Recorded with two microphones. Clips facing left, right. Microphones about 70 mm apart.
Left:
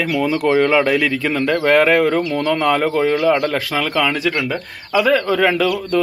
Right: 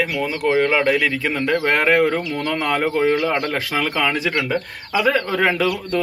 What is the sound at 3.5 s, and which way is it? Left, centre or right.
Speech, centre.